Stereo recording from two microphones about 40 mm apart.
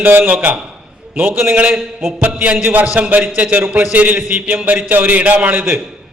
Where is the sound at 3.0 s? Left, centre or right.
Right.